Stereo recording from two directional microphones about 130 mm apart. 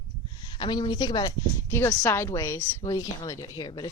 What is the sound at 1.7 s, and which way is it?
A woman's voice, 25° left (ahead or behind).